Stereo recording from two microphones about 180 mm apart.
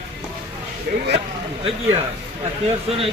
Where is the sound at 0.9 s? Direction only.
55° right (ahead or behind).